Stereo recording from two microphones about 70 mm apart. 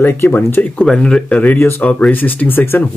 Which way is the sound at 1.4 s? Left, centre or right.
Left.